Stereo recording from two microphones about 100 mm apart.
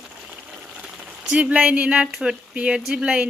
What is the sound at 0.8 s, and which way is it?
Speech, 10° right (ahead or behind).